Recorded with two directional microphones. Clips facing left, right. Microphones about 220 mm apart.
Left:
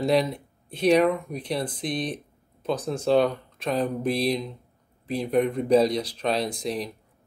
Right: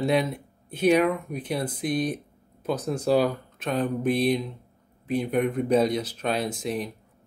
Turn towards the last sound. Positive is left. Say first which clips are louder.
# even
turn(degrees=-5)  # may be behind; listen again after turning